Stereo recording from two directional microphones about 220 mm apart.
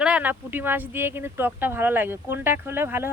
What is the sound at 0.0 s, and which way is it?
Speech, 5° right (ahead or behind).